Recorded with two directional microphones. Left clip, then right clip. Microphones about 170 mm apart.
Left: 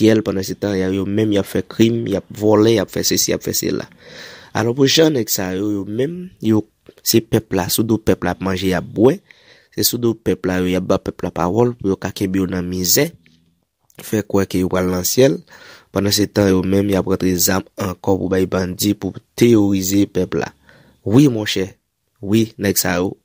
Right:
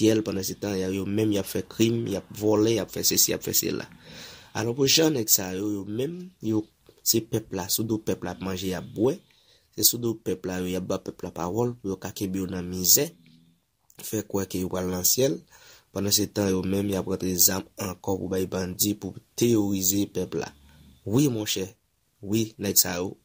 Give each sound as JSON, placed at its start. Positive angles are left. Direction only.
{"t": 0.0, "sound": "speech", "side_deg": 40}